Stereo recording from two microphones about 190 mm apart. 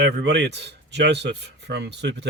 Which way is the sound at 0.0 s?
65° right (ahead or behind).